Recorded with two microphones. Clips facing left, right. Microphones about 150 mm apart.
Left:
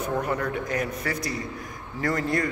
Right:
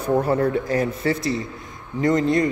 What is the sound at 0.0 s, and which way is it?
A man's voice, 30° right (ahead or behind).